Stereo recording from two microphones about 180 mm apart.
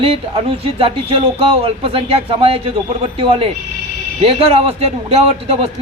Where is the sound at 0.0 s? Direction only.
35° right (ahead or behind).